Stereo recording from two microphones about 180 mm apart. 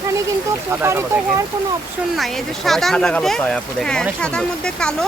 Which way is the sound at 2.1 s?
Centre (ahead or behind).